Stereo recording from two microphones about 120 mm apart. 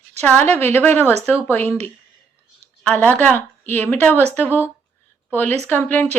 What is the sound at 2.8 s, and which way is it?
A woman's voice, 15° left (ahead or behind).